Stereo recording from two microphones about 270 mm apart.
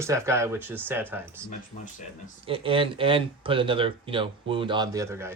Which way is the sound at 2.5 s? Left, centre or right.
Centre.